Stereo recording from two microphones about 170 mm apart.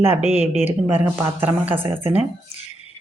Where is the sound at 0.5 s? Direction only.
45° left (ahead or behind).